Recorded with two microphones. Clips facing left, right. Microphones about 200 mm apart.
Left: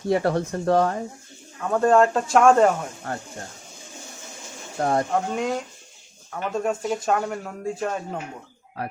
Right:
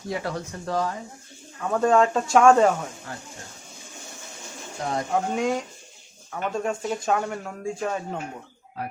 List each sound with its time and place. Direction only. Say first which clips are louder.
0.1 s speech: left 8 dB; 60° left (ahead or behind)
1.6 s speech: left 2 dB; centre (ahead or behind)
4.8 s speech: left 6 dB; 55° left (ahead or behind)
5.1 s speech: even; centre (ahead or behind)